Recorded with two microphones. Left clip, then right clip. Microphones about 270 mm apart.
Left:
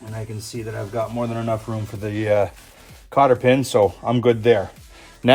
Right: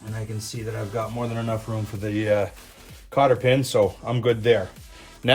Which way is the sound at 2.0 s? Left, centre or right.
Left.